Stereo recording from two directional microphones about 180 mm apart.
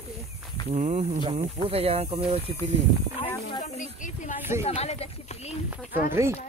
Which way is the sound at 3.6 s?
45° left (ahead or behind).